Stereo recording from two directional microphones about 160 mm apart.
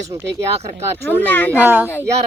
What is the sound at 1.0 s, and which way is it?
Speech, 10° left (ahead or behind).